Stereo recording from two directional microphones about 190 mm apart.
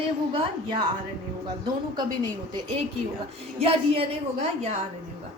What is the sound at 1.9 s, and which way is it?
A woman's voice, 25° right (ahead or behind).